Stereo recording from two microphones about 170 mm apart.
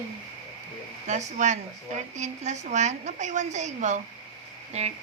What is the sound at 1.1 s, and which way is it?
A woman's voice, 45° right (ahead or behind).